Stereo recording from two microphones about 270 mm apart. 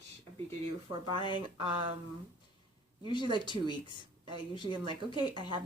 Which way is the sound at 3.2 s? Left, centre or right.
Centre.